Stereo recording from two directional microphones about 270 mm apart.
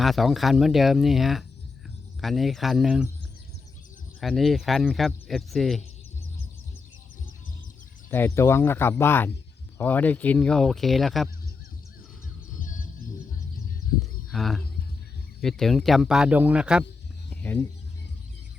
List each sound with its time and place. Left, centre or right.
0.0 s speech: centre
4.2 s speech: centre
8.1 s speech: centre
12.5 s music: left
14.0 s a sound: centre
15.4 s speech: centre
17.2 s music: centre